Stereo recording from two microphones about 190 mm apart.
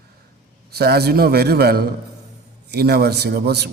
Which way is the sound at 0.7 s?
55° right (ahead or behind).